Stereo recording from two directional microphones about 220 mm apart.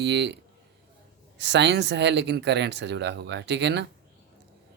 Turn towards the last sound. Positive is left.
turn(degrees=-50)  # may be behind; listen again after turning